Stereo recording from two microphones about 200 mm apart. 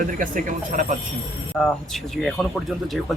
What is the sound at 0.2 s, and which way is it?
Speech, 40° right (ahead or behind).